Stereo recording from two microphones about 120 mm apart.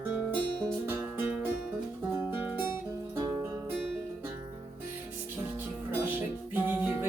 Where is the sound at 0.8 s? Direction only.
20° right (ahead or behind).